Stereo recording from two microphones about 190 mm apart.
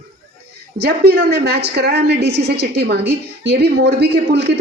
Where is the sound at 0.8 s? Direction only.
60° right (ahead or behind).